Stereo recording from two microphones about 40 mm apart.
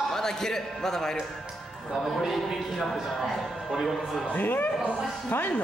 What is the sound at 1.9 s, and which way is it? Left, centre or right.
A man's voice, centre.